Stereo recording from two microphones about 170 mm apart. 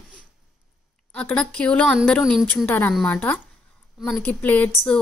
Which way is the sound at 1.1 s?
5° left (ahead or behind).